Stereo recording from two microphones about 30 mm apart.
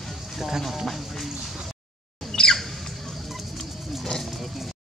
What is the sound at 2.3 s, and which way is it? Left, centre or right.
Squawk, left.